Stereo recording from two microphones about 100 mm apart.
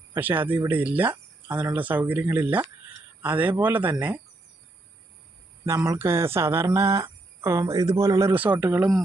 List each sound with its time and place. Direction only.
0.1 s a man's voice: 20° right (ahead or behind)
5.6 s speech: 30° right (ahead or behind)
8.5 s speech: 15° right (ahead or behind)